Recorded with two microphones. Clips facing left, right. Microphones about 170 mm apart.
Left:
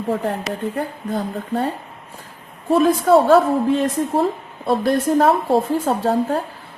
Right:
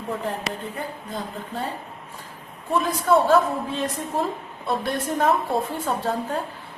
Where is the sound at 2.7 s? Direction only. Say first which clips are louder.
Left 6 dB; 50° left (ahead or behind).